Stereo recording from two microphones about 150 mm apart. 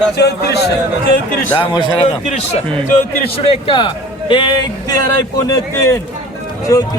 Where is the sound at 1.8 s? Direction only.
30° left (ahead or behind).